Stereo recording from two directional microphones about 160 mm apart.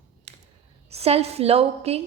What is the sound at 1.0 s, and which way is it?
A woman's voice, 40° right (ahead or behind).